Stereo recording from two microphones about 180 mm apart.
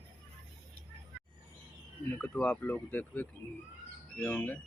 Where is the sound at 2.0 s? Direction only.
10° left (ahead or behind).